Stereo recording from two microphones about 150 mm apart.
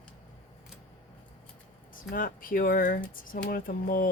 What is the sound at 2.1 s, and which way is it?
Speech, 70° left (ahead or behind).